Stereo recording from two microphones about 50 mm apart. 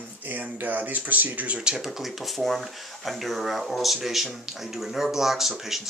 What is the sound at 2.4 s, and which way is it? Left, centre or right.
Speech, centre.